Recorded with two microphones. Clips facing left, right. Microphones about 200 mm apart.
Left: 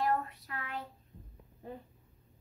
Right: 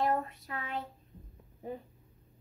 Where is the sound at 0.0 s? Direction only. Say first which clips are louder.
Right 1 dB; 25° right (ahead or behind).